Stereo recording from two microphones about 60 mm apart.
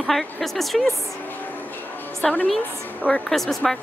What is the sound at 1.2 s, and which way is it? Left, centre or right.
Music, left.